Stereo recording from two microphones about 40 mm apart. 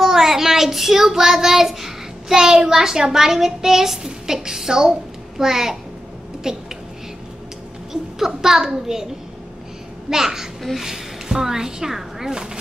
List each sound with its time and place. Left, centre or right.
0.0 s child singing: centre
5.4 s a child's voice: centre
7.9 s a child's voice: centre